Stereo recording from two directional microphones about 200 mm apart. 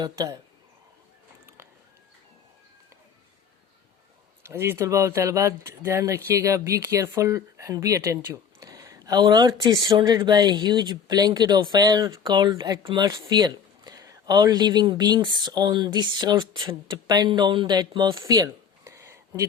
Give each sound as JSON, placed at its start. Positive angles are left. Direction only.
{"t": 0.0, "sound": "speech", "side_deg": -15}
{"t": 4.4, "sound": "speech", "side_deg": -10}